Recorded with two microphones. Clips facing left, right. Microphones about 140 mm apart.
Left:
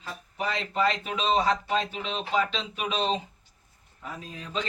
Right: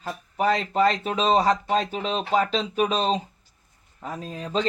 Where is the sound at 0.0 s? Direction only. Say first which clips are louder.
Right 8 dB; 45° right (ahead or behind).